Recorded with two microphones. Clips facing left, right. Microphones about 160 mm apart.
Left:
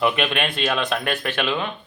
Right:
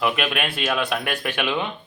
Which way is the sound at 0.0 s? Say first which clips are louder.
Left 2 dB; 5° right (ahead or behind).